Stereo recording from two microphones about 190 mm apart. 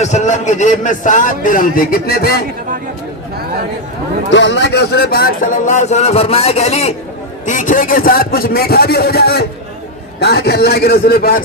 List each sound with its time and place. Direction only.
0.0 s a man's voice: 40° left (ahead or behind); by 2.4 s 55° left (ahead or behind)
4.3 s a man's voice: 70° left (ahead or behind); by 11.4 s 50° left (ahead or behind)